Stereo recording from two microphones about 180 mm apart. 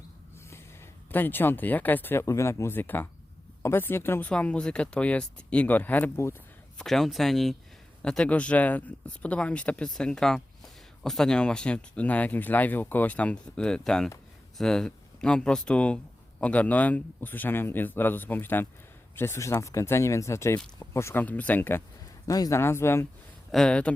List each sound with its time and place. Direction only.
1.1 s speech: 10° left (ahead or behind)
23.5 s speech: 5° left (ahead or behind)